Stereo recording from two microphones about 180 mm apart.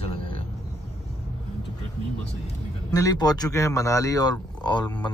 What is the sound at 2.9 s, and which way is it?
A man's voice, 20° left (ahead or behind).